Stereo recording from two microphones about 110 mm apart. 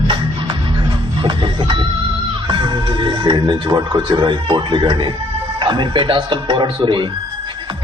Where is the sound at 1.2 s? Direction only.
50° right (ahead or behind).